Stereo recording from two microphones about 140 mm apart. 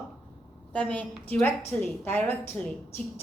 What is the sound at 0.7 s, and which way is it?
A woman's voice, 10° left (ahead or behind).